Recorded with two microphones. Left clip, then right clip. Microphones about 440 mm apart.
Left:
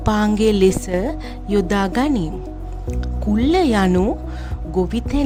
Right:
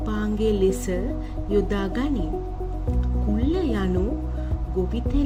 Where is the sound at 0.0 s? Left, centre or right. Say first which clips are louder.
Left 8 dB; left.